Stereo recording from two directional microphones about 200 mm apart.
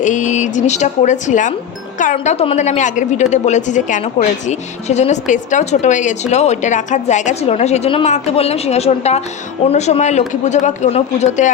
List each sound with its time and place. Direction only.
0.0 s a woman's voice: 35° left (ahead or behind)